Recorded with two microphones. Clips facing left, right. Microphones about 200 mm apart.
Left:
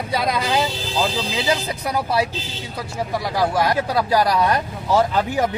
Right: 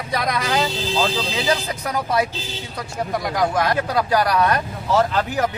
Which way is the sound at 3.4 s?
10° left (ahead or behind).